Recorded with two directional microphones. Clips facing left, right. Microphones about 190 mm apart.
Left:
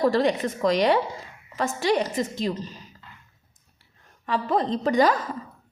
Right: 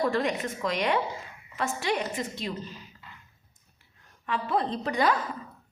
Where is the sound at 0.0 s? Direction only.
35° left (ahead or behind).